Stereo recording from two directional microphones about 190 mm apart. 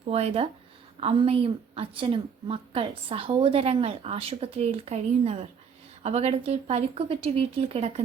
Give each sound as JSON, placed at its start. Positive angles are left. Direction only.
{"t": 0.1, "sound": "a woman's voice", "side_deg": -30}